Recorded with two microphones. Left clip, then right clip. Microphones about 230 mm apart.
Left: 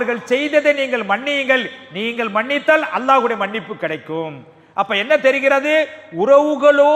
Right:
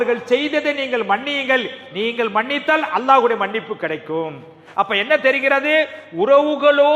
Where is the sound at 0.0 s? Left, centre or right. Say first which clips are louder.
Right 1 dB; left.